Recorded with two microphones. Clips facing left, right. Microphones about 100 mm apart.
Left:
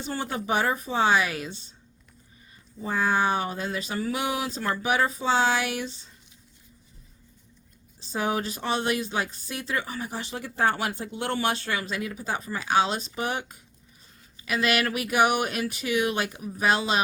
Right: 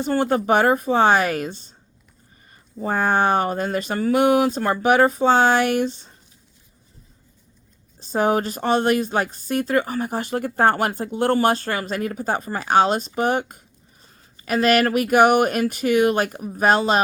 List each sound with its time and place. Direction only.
0.0 s speech: 55° right (ahead or behind)
2.7 s speech: 50° right (ahead or behind)
7.9 s speech: 45° right (ahead or behind)